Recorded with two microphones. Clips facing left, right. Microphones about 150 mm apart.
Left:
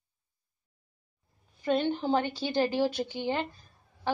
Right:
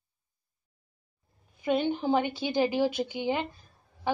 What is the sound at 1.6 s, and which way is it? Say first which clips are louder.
A woman's voice: right 1 dB; 10° right (ahead or behind).